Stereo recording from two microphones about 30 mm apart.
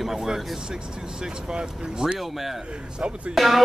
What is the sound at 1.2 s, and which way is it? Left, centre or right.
Speech, right.